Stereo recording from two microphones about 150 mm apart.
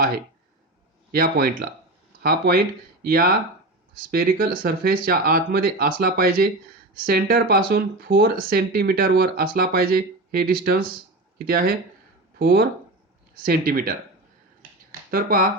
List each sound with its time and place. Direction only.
1.1 s speech: 85° right
13.4 s speech: 75° right (ahead or behind)
15.1 s speech: 75° right (ahead or behind)